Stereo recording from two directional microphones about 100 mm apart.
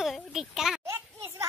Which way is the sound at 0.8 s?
30° right (ahead or behind).